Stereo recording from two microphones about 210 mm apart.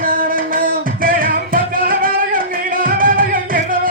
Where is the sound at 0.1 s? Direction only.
40° right (ahead or behind).